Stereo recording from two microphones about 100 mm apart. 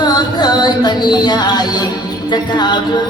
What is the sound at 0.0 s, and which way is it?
Music, 45° left (ahead or behind).